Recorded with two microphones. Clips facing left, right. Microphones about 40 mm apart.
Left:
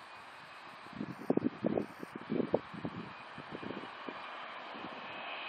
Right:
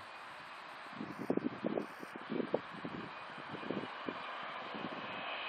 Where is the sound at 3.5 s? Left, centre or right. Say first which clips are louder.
Right 2 dB; centre.